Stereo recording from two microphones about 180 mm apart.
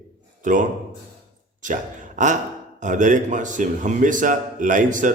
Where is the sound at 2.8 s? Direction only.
45° right (ahead or behind).